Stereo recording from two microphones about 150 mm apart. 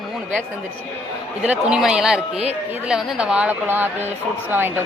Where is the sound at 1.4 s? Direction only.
5° right (ahead or behind).